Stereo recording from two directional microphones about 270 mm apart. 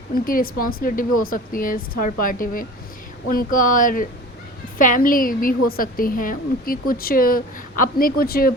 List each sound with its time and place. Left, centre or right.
0.1 s a woman's voice: left